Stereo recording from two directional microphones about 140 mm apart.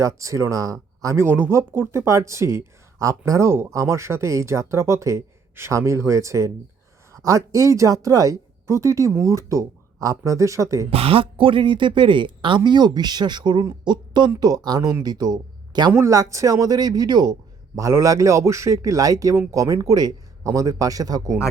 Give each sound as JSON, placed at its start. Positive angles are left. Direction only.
{"t": 0.0, "sound": "speech", "side_deg": -25}
{"t": 10.9, "sound": "speech", "side_deg": -40}